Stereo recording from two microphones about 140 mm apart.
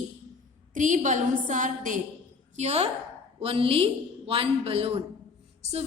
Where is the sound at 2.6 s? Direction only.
50° right (ahead or behind).